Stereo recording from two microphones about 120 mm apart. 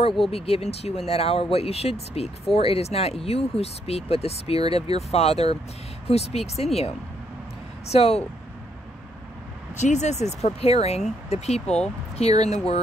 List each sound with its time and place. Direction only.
0.3 s speech: 55° left (ahead or behind)
7.9 s speech: 60° left (ahead or behind)
9.8 s speech: 75° left (ahead or behind)
11.6 s speech: 5° left (ahead or behind)
12.2 s speech: 60° left (ahead or behind)